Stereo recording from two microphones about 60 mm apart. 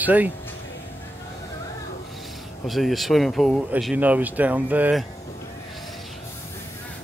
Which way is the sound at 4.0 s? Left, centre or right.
Right.